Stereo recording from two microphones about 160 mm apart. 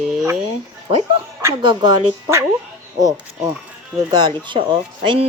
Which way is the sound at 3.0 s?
25° right (ahead or behind).